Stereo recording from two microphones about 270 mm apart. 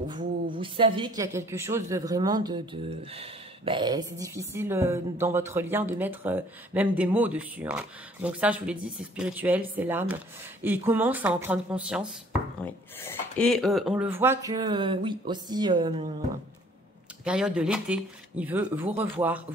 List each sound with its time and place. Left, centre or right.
0.1 s a woman's voice: centre
17.2 s speech: centre